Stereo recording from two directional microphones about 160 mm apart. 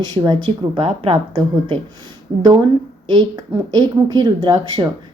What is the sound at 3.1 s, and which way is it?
A woman's voice, 30° right (ahead or behind).